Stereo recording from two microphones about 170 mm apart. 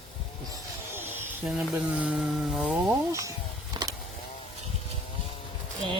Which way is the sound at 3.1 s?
20° right (ahead or behind).